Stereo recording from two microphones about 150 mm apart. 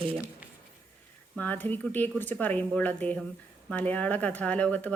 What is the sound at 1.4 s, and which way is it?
Speech, 10° left (ahead or behind).